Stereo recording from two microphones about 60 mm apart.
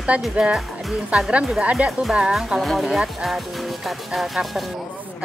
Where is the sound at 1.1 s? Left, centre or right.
Centre.